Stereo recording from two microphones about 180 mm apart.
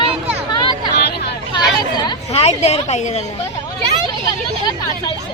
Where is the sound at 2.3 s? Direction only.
35° left (ahead or behind).